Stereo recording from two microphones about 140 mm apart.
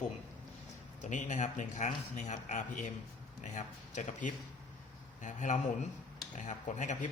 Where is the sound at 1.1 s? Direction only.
60° left (ahead or behind).